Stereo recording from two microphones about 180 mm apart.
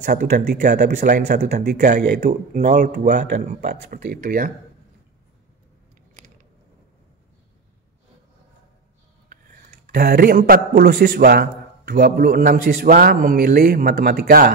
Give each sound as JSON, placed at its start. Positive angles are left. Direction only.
{"t": 0.0, "sound": "a man's voice", "side_deg": -45}
{"t": 3.6, "sound": "a man's voice", "side_deg": -55}
{"t": 9.3, "sound": "a man's voice", "side_deg": -50}